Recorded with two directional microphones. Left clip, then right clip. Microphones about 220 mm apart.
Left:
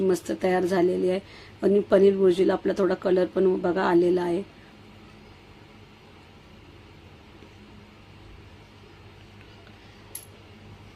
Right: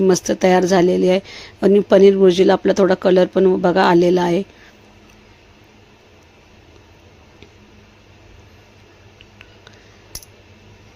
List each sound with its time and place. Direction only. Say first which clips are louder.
0.1 s speech: right 10 dB; 35° right (ahead or behind)